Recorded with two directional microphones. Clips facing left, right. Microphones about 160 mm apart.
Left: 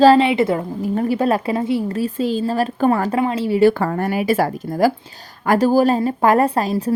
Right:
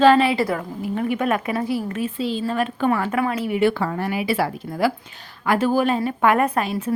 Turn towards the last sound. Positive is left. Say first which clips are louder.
# left 4 dB
turn(degrees=35)  # may be behind; listen again after turning